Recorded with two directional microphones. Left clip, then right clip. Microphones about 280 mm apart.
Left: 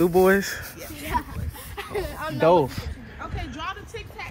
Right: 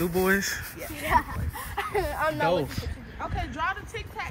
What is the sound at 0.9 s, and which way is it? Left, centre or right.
Speech, right.